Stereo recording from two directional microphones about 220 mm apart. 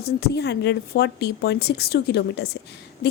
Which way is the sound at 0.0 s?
50° left (ahead or behind).